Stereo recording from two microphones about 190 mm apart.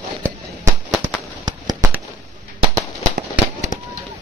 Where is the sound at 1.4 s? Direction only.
20° right (ahead or behind).